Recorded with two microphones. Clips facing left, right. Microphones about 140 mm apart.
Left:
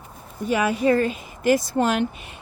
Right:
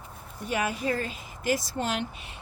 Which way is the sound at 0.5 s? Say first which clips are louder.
Left 9 dB; 85° left.